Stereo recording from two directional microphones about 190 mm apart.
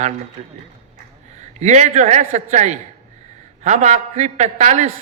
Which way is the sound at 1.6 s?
40° right (ahead or behind).